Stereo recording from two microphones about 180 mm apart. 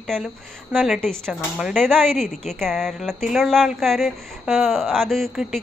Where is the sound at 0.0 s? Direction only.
Centre (ahead or behind).